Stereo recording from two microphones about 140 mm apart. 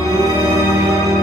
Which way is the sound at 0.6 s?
Centre (ahead or behind).